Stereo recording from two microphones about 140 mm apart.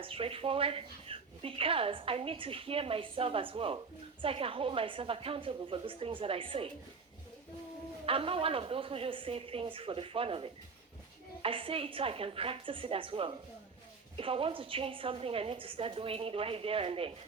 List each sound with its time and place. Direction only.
0.0 s speech: 40° right (ahead or behind)
8.0 s speech: 40° right (ahead or behind)